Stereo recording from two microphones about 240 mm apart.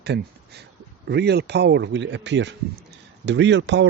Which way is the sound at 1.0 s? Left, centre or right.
Right.